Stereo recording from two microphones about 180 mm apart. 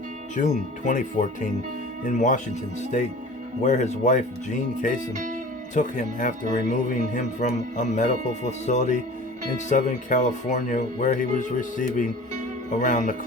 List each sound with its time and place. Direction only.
0.3 s speech: 45° left (ahead or behind)
3.6 s speech: 40° left (ahead or behind)
5.1 s speech: 45° right (ahead or behind)
5.7 s speech: 45° left (ahead or behind)